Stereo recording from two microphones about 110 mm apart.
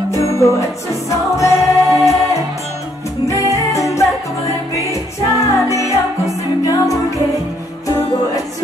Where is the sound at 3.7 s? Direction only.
30° left (ahead or behind).